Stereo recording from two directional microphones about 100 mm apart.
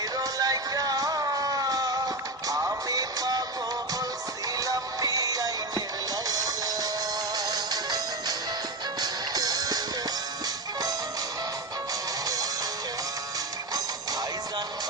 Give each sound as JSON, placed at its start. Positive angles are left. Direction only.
{"t": 0.2, "sound": "music", "side_deg": -35}
{"t": 4.6, "sound": "music", "side_deg": -35}